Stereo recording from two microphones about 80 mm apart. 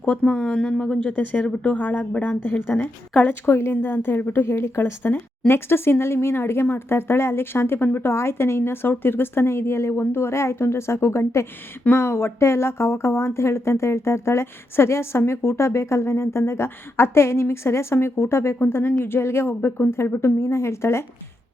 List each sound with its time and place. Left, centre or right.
0.0 s a woman's voice: centre; by 21.0 s left